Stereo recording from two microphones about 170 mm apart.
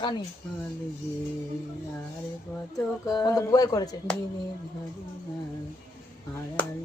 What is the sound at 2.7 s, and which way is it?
Speech, 20° left (ahead or behind).